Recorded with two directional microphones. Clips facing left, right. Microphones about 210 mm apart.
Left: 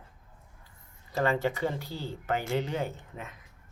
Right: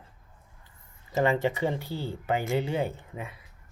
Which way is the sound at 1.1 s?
15° right (ahead or behind).